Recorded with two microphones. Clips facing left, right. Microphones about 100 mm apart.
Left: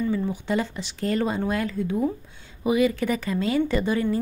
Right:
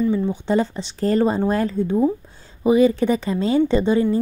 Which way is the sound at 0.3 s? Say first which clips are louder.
Right 6 dB; 30° right (ahead or behind).